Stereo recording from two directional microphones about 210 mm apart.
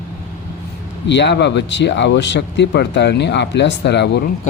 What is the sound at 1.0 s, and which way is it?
Speech, 55° left (ahead or behind).